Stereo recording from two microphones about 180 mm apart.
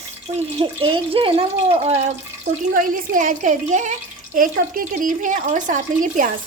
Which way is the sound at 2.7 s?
50° right (ahead or behind).